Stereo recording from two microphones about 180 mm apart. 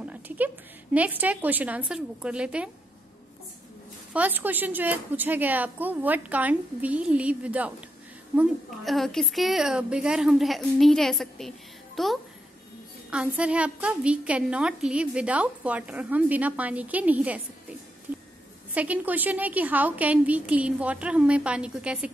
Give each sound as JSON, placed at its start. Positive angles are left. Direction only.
{"t": 0.0, "sound": "a sound", "side_deg": -10}
{"t": 0.9, "sound": "a woman's voice", "side_deg": -10}
{"t": 4.1, "sound": "a woman's voice", "side_deg": -10}
{"t": 18.8, "sound": "a woman's voice", "side_deg": -10}